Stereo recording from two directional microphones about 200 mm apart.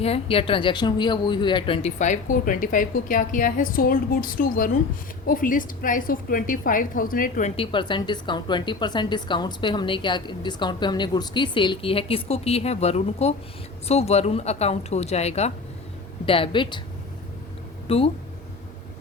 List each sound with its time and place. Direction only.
0.0 s a woman's voice: 30° left (ahead or behind)
7.5 s a woman's voice: 25° left (ahead or behind)
17.8 s speech: 30° left (ahead or behind)